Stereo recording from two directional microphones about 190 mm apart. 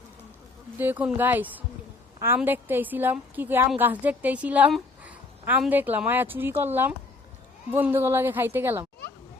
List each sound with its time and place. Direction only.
0.8 s a woman's voice: 10° right (ahead or behind)